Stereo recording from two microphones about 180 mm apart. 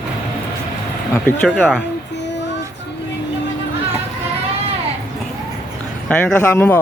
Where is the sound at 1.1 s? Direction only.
5° left (ahead or behind).